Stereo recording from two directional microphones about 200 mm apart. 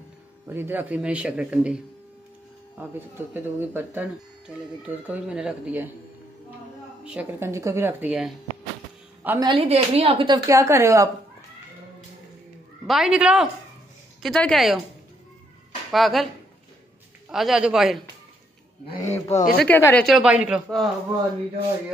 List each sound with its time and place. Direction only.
0.5 s speech: 10° right (ahead or behind)
3.0 s speech: 10° right (ahead or behind)
7.1 s a woman's voice: 10° right (ahead or behind)
9.5 s a woman's voice: 30° right (ahead or behind); by 11.1 s 15° right (ahead or behind)
12.8 s speech: centre (ahead or behind)
15.9 s speech: centre (ahead or behind)
17.3 s speech: centre (ahead or behind)
19.0 s speech: 10° left (ahead or behind)
19.3 s speech: 45° left (ahead or behind)
19.6 s speech: 10° left (ahead or behind)